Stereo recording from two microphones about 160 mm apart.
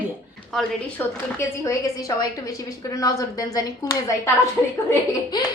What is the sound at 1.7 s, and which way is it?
A woman's voice, 20° left (ahead or behind).